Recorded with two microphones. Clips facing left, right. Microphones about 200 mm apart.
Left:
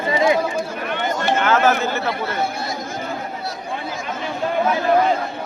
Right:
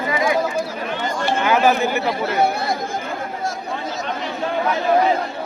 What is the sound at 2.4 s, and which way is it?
Speech, 60° right (ahead or behind).